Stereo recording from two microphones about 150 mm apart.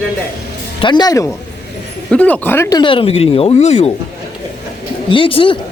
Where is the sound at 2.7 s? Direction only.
35° left (ahead or behind).